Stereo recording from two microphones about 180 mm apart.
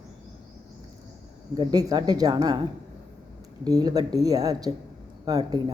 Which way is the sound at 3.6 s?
20° right (ahead or behind).